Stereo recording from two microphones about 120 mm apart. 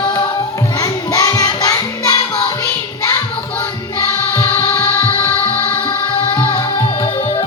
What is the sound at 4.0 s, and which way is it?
Music, 20° left (ahead or behind).